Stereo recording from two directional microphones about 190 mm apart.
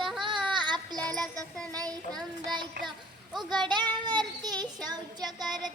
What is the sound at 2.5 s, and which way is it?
A child's voice, 25° right (ahead or behind).